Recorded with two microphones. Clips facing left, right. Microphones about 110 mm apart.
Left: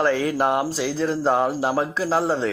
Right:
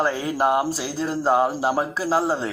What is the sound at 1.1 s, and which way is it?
A man's voice, 10° right (ahead or behind).